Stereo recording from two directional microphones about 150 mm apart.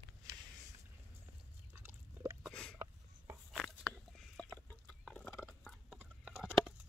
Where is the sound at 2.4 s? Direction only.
5° left (ahead or behind).